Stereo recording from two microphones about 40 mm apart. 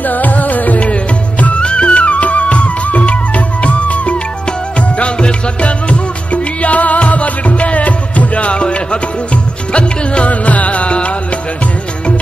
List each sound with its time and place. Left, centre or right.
0.0 s music: left
0.8 s music: left